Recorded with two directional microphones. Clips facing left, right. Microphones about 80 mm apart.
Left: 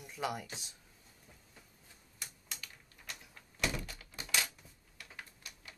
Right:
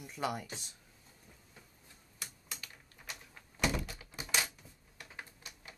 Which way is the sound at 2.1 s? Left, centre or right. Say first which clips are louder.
Right 1 dB; centre.